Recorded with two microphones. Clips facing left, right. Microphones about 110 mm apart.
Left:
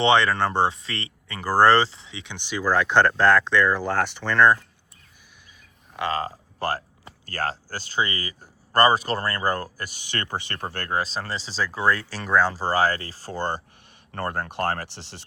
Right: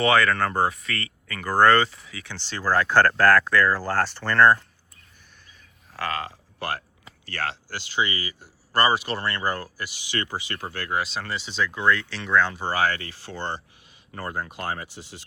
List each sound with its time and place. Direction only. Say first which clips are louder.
0.0 s speech: left 1 dB; 25° left (ahead or behind)
6.0 s speech: left 3 dB; 30° left (ahead or behind)
14.1 s speech: left 3 dB; 55° left (ahead or behind)